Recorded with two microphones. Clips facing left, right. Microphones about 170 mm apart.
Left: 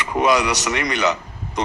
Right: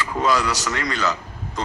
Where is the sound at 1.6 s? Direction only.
20° left (ahead or behind).